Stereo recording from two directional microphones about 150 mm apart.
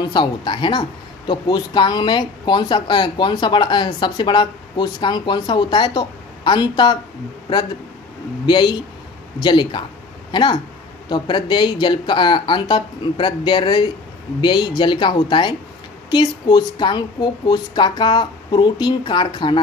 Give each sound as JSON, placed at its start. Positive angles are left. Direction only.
{"t": 0.1, "sound": "speech", "side_deg": 30}
{"t": 8.5, "sound": "speech", "side_deg": 30}